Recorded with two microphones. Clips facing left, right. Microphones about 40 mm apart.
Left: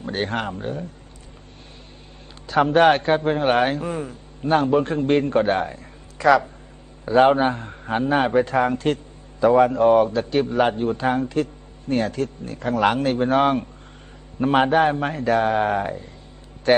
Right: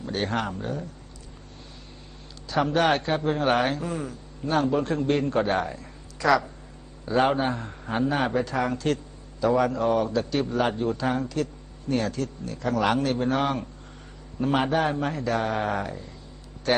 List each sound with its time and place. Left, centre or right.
0.0 s a man's voice: left
2.5 s a man's voice: left